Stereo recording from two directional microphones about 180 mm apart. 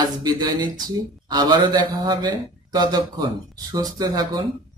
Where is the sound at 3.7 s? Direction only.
20° right (ahead or behind).